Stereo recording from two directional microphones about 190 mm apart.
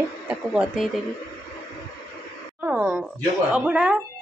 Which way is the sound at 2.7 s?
5° right (ahead or behind).